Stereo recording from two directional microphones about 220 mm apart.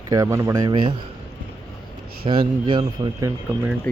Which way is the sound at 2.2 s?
25° right (ahead or behind).